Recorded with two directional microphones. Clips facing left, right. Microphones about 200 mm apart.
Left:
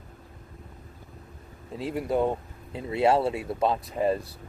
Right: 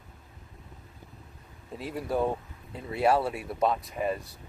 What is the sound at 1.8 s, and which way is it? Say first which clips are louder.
Speech: left 3 dB; 25° left (ahead or behind).